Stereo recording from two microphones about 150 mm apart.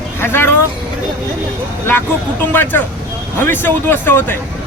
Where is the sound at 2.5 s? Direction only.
15° left (ahead or behind).